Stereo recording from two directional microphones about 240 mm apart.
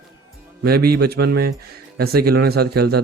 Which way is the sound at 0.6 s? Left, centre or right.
Right.